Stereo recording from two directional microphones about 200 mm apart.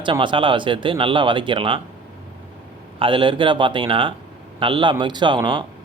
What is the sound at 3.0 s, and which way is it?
Speech, 25° right (ahead or behind).